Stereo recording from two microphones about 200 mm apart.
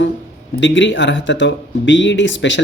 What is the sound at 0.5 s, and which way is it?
Speech, 65° left (ahead or behind).